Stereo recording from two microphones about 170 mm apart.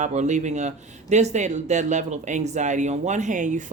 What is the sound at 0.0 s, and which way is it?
Speech, 45° right (ahead or behind).